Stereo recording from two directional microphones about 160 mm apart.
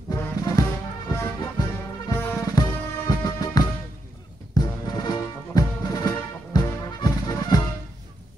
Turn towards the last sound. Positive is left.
turn(degrees=25)  # may be behind; listen again after turning